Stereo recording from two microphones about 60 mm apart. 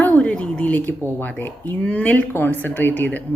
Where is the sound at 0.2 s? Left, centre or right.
Centre.